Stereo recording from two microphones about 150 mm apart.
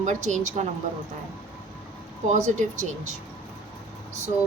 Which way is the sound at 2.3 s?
50° right (ahead or behind).